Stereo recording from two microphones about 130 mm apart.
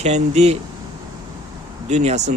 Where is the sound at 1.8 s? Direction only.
60° right (ahead or behind).